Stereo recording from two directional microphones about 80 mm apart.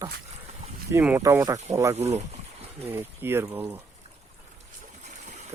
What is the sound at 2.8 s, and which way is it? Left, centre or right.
Speech, right.